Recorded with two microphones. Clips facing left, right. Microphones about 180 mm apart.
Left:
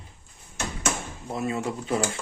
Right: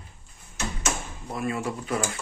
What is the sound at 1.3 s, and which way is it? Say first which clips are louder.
Speech: left 1 dB; 25° left (ahead or behind).